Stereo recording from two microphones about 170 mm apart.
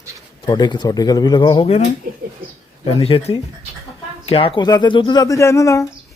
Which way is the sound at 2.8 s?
35° left (ahead or behind).